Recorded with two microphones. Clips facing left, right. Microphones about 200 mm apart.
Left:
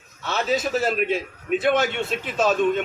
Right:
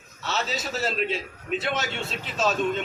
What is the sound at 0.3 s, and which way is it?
A man's voice, 55° left (ahead or behind).